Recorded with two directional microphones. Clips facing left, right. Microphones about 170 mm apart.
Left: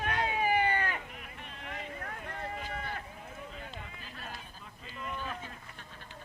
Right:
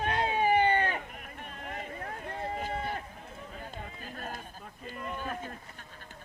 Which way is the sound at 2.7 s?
30° right (ahead or behind).